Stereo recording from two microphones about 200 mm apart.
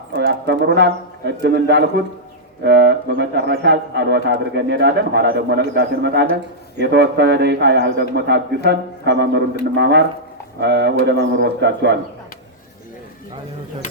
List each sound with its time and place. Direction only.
0.1 s speech: 60° right (ahead or behind)